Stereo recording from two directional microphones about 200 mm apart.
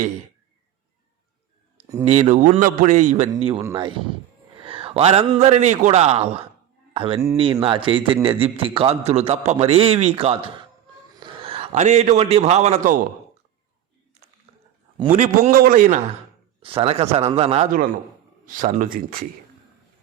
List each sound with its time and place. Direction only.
2.0 s a man's voice: 35° right (ahead or behind)
4.6 s a man's voice: 25° right (ahead or behind)
15.1 s a man's voice: 40° right (ahead or behind)
16.6 s a man's voice: 30° right (ahead or behind)
18.4 s speech: 40° right (ahead or behind)